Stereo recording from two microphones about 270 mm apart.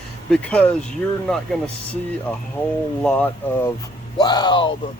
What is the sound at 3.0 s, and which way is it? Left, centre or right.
Speech, centre.